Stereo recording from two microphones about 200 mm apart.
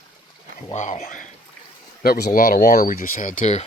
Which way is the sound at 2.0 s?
50° left (ahead or behind).